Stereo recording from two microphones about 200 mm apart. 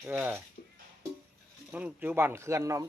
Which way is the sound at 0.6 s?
40° left (ahead or behind).